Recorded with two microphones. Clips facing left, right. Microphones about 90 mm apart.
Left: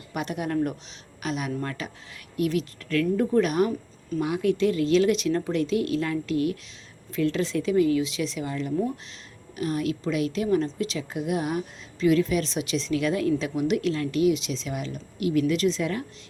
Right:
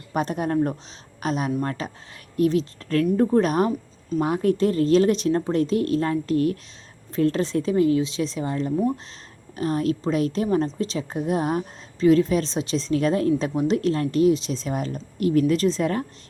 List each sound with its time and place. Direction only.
0.1 s a woman's voice: 35° right (ahead or behind)